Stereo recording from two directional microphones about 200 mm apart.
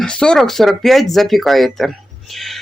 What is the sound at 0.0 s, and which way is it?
Speech, 5° left (ahead or behind).